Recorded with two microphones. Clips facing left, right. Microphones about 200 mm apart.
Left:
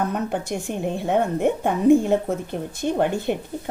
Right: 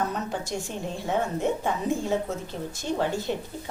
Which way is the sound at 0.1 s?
55° left (ahead or behind).